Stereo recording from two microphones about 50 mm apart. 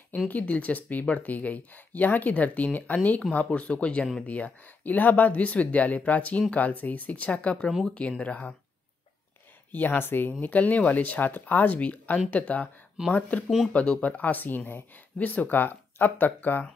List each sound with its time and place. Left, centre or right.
0.3 s speech: left
9.7 s speech: left
10.4 s speech: left